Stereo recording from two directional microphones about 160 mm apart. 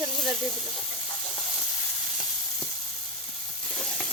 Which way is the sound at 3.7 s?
5° left (ahead or behind).